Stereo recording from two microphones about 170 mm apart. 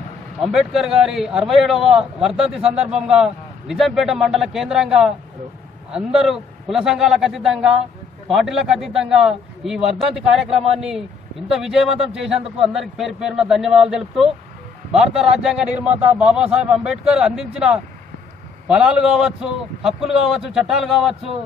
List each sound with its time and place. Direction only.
0.6 s a man's voice: centre (ahead or behind)